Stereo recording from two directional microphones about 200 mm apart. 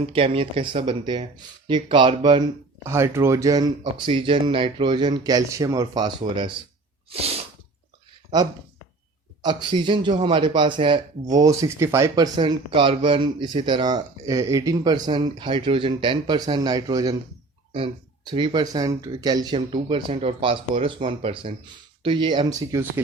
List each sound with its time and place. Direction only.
0.0 s speech: 30° right (ahead or behind)
7.1 s sneeze: 30° right (ahead or behind)
9.4 s speech: 20° right (ahead or behind)